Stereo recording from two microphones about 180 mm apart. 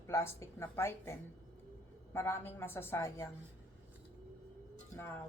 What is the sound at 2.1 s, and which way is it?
A woman's voice, 15° left (ahead or behind).